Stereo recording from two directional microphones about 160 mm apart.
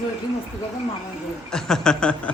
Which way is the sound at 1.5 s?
5° left (ahead or behind).